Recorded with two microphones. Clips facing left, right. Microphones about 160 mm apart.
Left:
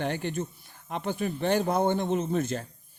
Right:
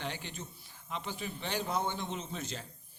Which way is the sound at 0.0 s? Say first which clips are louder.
Left 11 dB; 55° left (ahead or behind).